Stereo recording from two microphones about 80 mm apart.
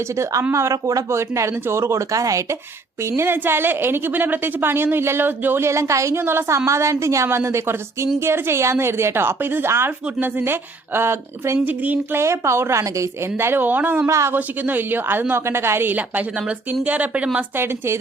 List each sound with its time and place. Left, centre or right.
0.5 s a woman's voice: right
3.1 s a woman's voice: right
11.6 s a woman's voice: right
12.2 s a woman's voice: right
14.1 s a woman's voice: right
14.3 s a woman's voice: right
17.6 s a woman's voice: right